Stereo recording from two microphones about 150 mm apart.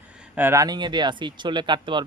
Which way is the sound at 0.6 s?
30° right (ahead or behind).